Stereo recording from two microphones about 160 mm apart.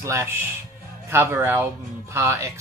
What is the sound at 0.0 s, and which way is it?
Speech, 20° right (ahead or behind).